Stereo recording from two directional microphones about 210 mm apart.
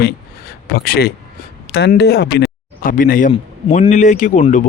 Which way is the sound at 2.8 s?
40° left (ahead or behind).